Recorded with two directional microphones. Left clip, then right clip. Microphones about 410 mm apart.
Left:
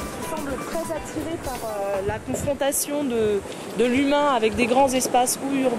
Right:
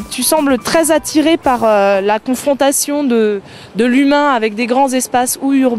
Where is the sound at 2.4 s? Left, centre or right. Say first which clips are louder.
Right 11 dB; right.